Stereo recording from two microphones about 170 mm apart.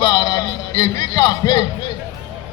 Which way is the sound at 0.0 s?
25° left (ahead or behind).